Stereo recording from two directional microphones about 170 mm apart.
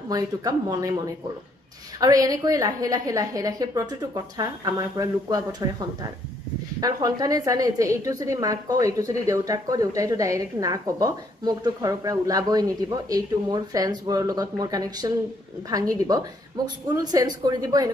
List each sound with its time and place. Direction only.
0.1 s a woman's voice: 20° right (ahead or behind)
6.8 s a woman's voice: 20° right (ahead or behind)